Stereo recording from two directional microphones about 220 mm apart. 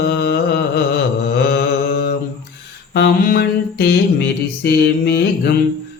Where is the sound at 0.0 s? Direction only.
45° left (ahead or behind).